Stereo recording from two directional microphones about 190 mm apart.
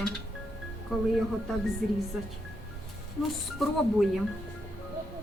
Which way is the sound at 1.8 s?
50° right (ahead or behind).